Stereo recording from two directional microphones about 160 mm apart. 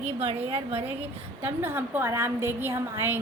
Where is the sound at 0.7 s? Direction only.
10° right (ahead or behind).